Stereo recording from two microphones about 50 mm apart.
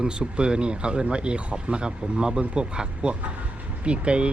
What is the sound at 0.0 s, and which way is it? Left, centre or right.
Speech, centre.